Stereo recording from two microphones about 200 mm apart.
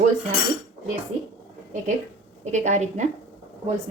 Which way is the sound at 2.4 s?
35° right (ahead or behind).